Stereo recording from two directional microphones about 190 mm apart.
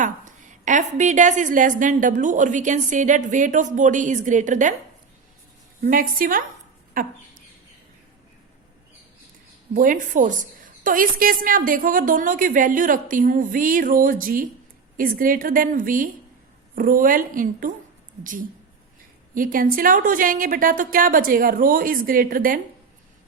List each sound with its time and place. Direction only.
0.0 s a woman's voice: 40° right (ahead or behind)
5.8 s a woman's voice: 50° right (ahead or behind)
9.7 s a woman's voice: 45° right (ahead or behind)